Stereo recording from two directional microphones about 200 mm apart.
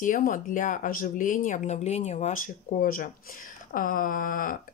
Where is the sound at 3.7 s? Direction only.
45° left (ahead or behind).